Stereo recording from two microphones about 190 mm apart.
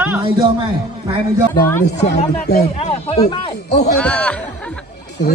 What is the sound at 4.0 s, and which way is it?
Speech, 5° left (ahead or behind).